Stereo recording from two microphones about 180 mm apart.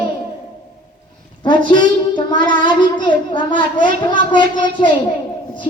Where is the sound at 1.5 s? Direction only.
25° left (ahead or behind).